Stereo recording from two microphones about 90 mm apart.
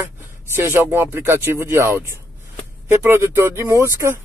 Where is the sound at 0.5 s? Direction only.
25° right (ahead or behind).